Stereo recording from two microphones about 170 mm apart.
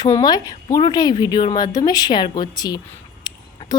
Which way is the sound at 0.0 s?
25° left (ahead or behind).